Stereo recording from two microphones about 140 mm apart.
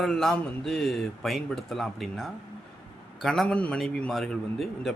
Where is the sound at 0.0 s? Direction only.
5° left (ahead or behind).